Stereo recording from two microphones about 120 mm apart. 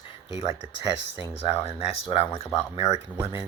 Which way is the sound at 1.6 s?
55° left (ahead or behind).